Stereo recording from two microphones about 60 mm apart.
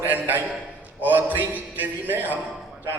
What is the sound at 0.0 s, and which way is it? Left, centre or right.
A man's voice, right.